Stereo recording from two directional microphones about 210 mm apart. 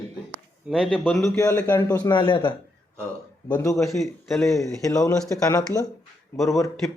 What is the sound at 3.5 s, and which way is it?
Speech, 15° left (ahead or behind).